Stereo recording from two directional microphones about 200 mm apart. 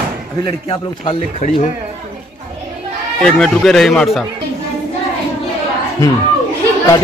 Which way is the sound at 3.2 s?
5° left (ahead or behind).